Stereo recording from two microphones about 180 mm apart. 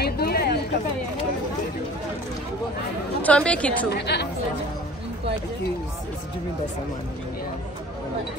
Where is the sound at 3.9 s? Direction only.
65° left (ahead or behind).